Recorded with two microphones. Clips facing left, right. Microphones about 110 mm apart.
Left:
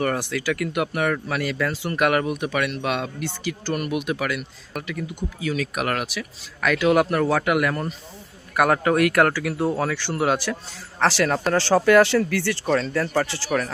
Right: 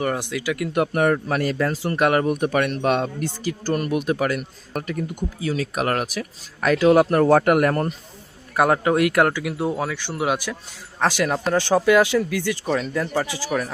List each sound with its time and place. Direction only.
0.0 s speech: 15° right (ahead or behind)
0.7 s speech: 35° right (ahead or behind)
2.4 s speech: 40° right (ahead or behind)
8.5 s speech: 25° right (ahead or behind)